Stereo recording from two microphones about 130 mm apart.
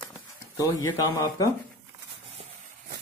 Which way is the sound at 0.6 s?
25° left (ahead or behind).